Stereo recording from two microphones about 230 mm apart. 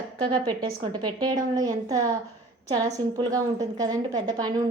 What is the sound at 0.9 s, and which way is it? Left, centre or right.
A woman's voice, centre.